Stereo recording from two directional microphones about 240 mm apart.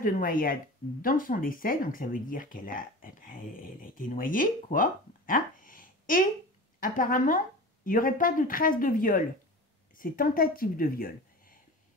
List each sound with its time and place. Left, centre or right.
0.0 s speech: left